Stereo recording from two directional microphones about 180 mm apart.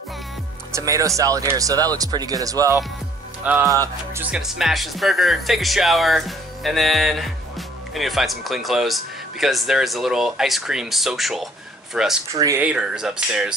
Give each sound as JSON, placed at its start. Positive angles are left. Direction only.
{"t": 0.7, "sound": "speech", "side_deg": -20}
{"t": 4.1, "sound": "speech", "side_deg": -10}
{"t": 12.4, "sound": "speech", "side_deg": -20}
{"t": 12.6, "sound": "speech", "side_deg": -5}